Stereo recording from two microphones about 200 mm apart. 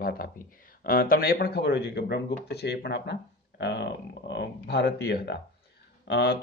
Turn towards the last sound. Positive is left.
turn(degrees=55)  # may be behind; listen again after turning